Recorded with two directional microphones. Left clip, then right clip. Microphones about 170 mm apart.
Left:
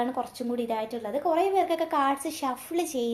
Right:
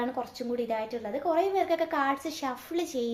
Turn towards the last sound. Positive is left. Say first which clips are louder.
# left 2 dB
turn(degrees=10)  # may be behind; listen again after turning